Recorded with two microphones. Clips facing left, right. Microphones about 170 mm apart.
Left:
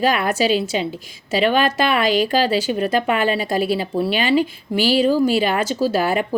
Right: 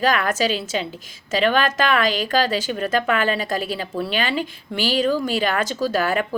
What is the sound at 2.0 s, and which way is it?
Speech, 40° right (ahead or behind).